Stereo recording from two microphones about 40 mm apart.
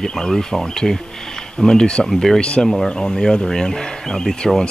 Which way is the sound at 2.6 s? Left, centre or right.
Centre.